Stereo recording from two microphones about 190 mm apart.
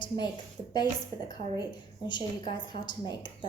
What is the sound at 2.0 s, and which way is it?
A woman's voice, 25° left (ahead or behind).